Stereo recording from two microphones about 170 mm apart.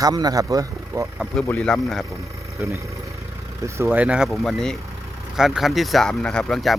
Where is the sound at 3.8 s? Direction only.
5° right (ahead or behind).